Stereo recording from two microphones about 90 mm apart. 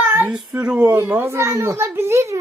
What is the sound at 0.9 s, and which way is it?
A child's voice, 20° right (ahead or behind).